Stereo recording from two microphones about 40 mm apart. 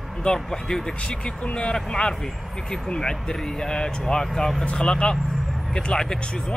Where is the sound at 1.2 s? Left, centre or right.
Left; by 4.6 s centre.